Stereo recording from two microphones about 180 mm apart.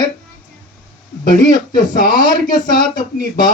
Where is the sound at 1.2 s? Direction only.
50° left (ahead or behind).